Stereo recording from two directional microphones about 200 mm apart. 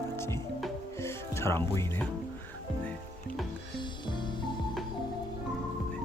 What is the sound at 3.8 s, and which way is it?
Music, 25° left (ahead or behind).